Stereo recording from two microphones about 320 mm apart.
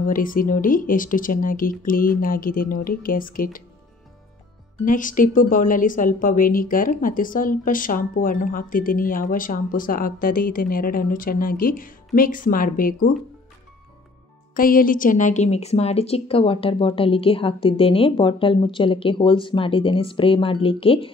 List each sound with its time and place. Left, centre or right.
0.0 s a woman's voice: left
4.8 s a woman's voice: left
14.5 s a woman's voice: left